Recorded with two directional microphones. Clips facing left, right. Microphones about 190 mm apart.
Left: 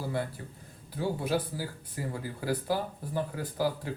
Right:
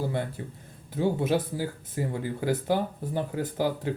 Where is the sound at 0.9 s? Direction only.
25° right (ahead or behind).